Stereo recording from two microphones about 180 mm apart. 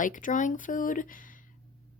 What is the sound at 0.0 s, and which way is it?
A woman's voice, 45° left (ahead or behind).